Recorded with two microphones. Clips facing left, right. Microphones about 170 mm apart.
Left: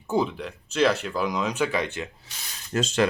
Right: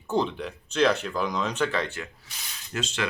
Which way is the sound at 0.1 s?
5° left (ahead or behind).